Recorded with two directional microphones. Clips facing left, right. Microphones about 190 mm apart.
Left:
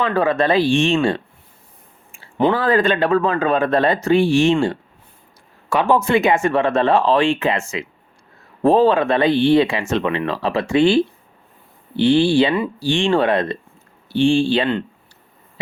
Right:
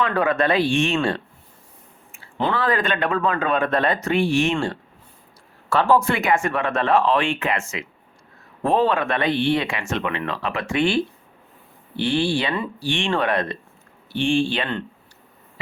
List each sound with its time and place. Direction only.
0.2 s speech: 30° left (ahead or behind)
2.6 s speech: 30° left (ahead or behind)